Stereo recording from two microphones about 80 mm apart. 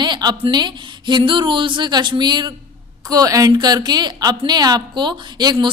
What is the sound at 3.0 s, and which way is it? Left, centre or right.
Speech, right.